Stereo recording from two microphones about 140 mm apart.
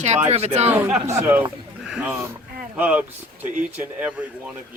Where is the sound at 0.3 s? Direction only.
50° right (ahead or behind).